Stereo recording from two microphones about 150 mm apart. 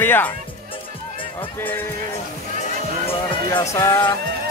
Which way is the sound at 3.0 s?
35° left (ahead or behind).